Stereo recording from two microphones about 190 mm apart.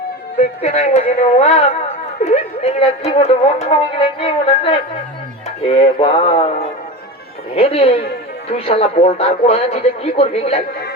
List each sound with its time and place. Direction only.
0.6 s speech: 35° left (ahead or behind)